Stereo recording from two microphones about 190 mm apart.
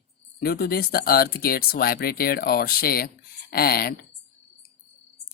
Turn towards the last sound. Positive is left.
turn(degrees=55)  # may be behind; listen again after turning